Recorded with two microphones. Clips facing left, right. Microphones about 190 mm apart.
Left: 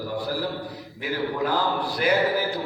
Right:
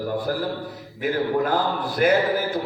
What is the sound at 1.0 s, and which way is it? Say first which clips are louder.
A man's voice: right 4 dB; 50° right (ahead or behind).